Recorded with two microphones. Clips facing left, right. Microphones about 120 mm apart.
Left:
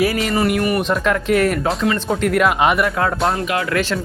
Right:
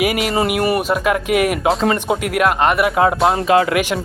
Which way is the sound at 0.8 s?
10° right (ahead or behind).